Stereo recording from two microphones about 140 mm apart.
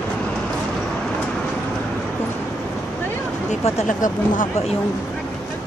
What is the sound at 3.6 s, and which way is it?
Speech, 60° left (ahead or behind).